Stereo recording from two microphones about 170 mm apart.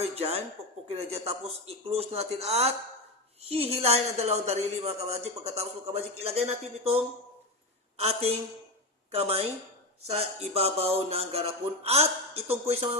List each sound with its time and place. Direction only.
0.0 s a woman's voice: 35° right (ahead or behind)
7.9 s a woman's voice: 35° right (ahead or behind)